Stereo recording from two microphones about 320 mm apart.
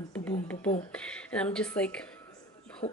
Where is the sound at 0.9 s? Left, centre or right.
Centre.